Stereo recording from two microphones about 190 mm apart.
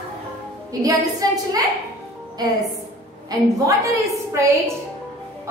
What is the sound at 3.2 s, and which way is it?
A woman's voice, 15° right (ahead or behind).